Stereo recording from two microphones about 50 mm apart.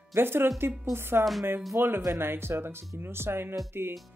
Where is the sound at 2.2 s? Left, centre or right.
Right.